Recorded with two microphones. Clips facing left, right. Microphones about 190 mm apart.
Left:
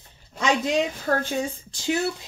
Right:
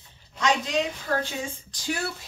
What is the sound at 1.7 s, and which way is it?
Speech, 25° left (ahead or behind).